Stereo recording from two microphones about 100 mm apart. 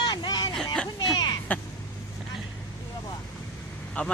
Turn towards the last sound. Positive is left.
turn(degrees=15)  # may be behind; listen again after turning